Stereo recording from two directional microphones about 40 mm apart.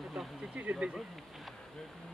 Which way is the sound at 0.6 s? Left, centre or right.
Right.